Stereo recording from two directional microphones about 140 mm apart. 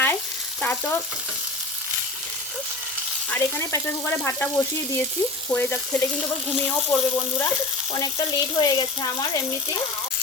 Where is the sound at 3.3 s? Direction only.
20° left (ahead or behind).